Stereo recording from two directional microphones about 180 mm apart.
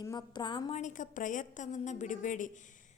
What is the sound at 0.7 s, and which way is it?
A woman's voice, 45° left (ahead or behind).